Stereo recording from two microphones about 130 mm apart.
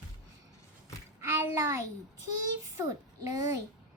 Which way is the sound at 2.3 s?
25° right (ahead or behind).